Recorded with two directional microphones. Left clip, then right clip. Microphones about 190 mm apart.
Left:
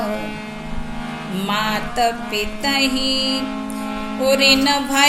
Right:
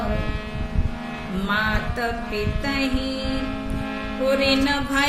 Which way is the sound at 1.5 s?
15° right (ahead or behind).